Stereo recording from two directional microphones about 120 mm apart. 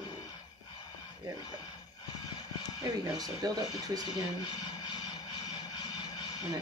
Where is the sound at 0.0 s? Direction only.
40° left (ahead or behind).